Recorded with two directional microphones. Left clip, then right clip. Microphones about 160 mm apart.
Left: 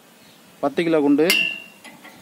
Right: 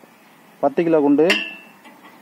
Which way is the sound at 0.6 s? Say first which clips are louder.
Right 3 dB; 15° right (ahead or behind).